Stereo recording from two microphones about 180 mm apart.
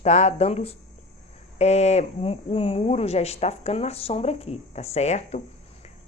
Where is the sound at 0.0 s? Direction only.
40° left (ahead or behind).